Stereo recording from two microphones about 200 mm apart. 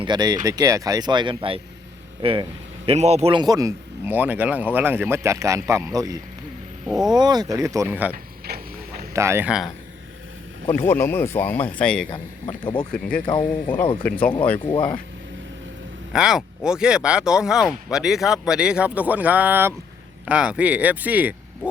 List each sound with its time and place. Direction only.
0.0 s a man's voice: 20° right (ahead or behind)
6.8 s speech: centre (ahead or behind)
7.2 s a man's voice: 20° right (ahead or behind)
8.1 s a sound: 50° right (ahead or behind)
9.1 s a man's voice: 15° right (ahead or behind)
10.8 s speech: 10° left (ahead or behind)
12.1 s speech: 25° left (ahead or behind)
12.9 s speech: 5° left (ahead or behind)
13.2 s speech: 25° left (ahead or behind)
14.0 s speech: 5° left (ahead or behind)
16.1 s a man's voice: 5° right (ahead or behind)